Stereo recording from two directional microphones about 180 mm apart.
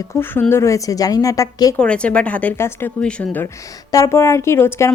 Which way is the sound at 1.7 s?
5° left (ahead or behind).